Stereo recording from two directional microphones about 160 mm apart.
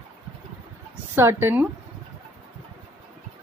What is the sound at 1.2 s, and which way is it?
Speech, 15° right (ahead or behind).